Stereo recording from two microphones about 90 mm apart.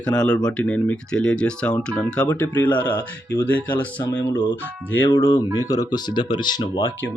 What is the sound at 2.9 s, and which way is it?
Speech, 45° left (ahead or behind).